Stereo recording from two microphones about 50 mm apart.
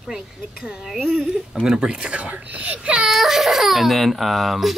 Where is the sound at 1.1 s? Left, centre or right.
Centre.